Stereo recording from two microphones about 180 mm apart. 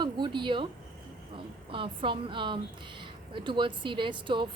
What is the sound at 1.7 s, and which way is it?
A woman's voice, 30° right (ahead or behind).